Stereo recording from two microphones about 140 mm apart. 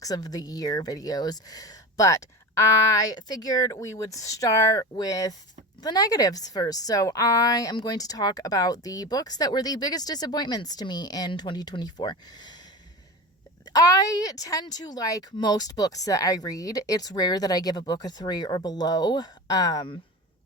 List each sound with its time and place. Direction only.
0.0 s a woman's voice: 25° left (ahead or behind)
13.7 s a woman's voice: 25° left (ahead or behind)